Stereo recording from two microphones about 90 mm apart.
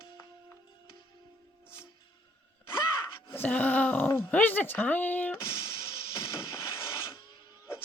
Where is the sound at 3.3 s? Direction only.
20° left (ahead or behind).